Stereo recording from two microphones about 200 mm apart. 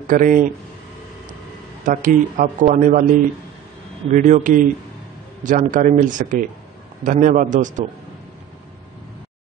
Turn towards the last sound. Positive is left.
turn(degrees=-40)  # may be behind; listen again after turning